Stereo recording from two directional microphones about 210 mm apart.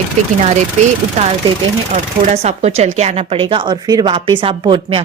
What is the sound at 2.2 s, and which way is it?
A woman's voice, 30° right (ahead or behind).